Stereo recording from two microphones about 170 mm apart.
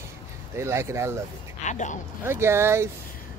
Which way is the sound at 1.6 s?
45° left (ahead or behind).